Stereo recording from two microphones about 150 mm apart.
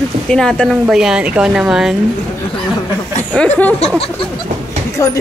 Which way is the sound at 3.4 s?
10° left (ahead or behind).